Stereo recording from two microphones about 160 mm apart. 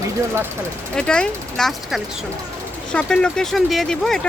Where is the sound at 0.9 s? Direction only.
5° left (ahead or behind).